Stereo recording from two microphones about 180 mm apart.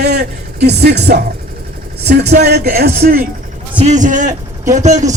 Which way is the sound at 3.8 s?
40° right (ahead or behind).